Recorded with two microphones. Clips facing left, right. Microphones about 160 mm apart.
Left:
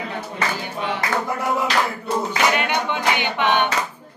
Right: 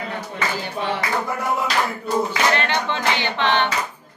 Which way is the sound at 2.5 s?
15° left (ahead or behind).